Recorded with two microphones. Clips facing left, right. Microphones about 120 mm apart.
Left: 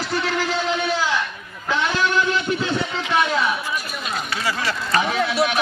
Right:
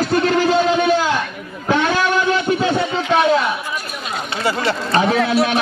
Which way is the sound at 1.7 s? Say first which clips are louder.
Right 5 dB; 50° right (ahead or behind).